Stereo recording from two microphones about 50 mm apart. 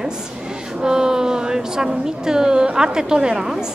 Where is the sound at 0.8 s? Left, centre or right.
Centre.